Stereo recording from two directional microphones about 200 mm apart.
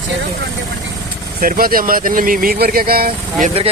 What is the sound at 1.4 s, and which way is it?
Speech, 45° right (ahead or behind).